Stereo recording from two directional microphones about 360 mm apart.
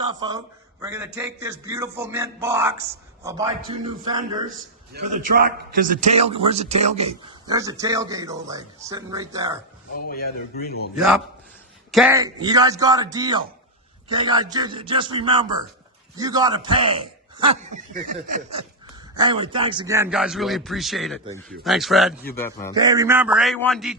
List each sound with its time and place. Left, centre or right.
0.2 s a man's voice: centre
10.1 s a man's voice: left
10.9 s a man's voice: centre
22.7 s a man's voice: centre